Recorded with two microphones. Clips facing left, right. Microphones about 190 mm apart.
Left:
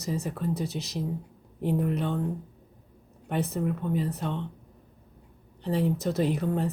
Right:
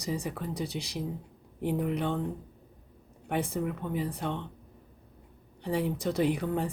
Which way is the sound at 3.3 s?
10° right (ahead or behind).